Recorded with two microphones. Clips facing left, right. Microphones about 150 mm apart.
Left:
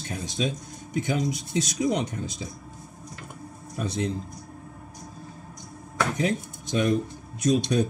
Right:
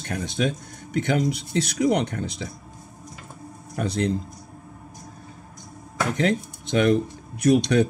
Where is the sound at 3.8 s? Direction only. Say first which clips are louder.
Right 4 dB; 70° right (ahead or behind).